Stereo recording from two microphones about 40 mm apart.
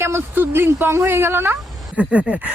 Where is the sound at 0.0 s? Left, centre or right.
Right.